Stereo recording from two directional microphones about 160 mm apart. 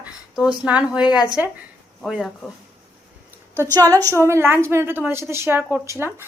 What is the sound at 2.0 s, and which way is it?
Speech, centre (ahead or behind).